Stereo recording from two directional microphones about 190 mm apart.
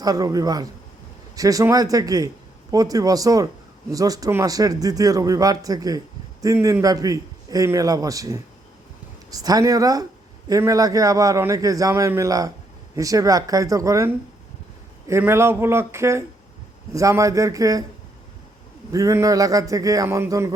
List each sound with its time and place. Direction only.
0.0 s a man's voice: 20° right (ahead or behind)
18.9 s a man's voice: 15° right (ahead or behind)